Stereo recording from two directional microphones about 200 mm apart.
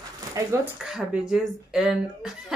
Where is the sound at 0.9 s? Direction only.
5° right (ahead or behind).